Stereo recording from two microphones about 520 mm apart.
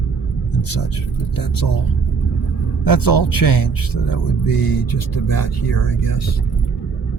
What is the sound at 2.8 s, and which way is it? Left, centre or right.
Speech, left.